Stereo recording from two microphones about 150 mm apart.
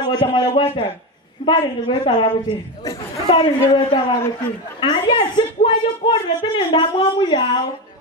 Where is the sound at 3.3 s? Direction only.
35° left (ahead or behind).